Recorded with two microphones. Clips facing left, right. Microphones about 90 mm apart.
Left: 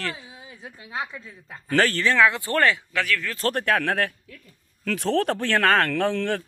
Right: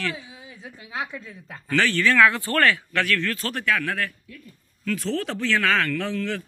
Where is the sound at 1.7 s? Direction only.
40° left (ahead or behind).